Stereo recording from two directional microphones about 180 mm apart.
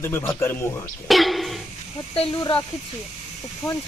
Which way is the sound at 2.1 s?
35° left (ahead or behind).